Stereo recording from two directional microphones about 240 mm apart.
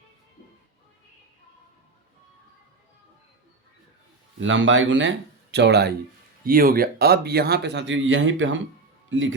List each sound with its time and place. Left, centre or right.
4.4 s speech: right